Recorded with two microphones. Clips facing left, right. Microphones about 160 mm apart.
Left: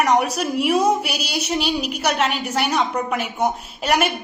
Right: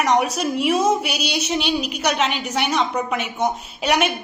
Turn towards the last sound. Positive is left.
turn(degrees=5)  # may be behind; listen again after turning